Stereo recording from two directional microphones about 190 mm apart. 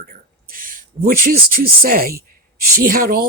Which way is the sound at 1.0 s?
50° right (ahead or behind).